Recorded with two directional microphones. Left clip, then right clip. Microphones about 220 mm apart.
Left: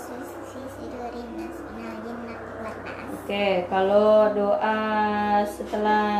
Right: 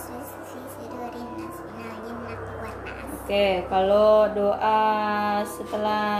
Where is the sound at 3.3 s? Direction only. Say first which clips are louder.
Right 2 dB; 35° right (ahead or behind).